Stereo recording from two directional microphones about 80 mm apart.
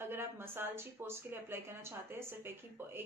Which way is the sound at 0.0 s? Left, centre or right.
Right.